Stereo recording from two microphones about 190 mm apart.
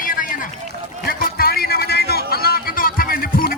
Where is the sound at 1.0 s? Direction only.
50° left (ahead or behind).